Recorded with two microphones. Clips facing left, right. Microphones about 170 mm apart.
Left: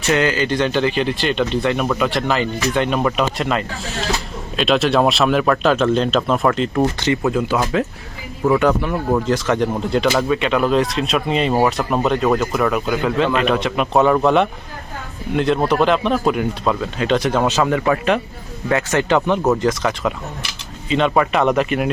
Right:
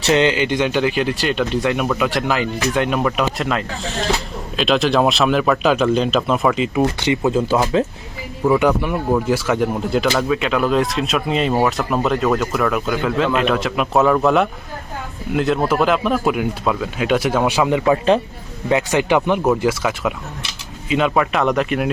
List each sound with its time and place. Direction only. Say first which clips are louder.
0.1 s speech: right 2 dB; 20° right (ahead or behind); by 6.8 s 5° right (ahead or behind)
7.0 s speech: even; 15° right (ahead or behind)
7.3 s speech: right 2 dB; 25° right (ahead or behind)
8.5 s speech: even; 15° right (ahead or behind)
18.7 s speech: right 1 dB; 15° right (ahead or behind)